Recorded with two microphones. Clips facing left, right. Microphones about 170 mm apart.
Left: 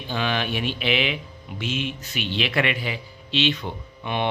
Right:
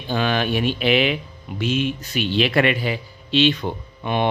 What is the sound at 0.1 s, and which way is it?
Speech, 45° right (ahead or behind).